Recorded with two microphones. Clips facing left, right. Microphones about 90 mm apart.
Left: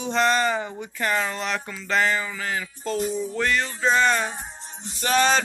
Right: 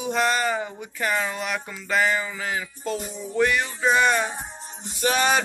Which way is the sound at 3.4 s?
15° right (ahead or behind).